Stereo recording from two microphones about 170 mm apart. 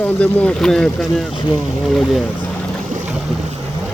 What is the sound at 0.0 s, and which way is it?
Speech, 10° left (ahead or behind).